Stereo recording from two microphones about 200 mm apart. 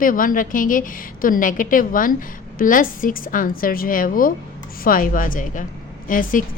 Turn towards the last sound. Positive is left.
turn(degrees=40)  # may be behind; listen again after turning